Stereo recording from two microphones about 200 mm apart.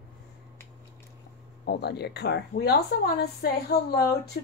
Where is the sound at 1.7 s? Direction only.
55° left (ahead or behind).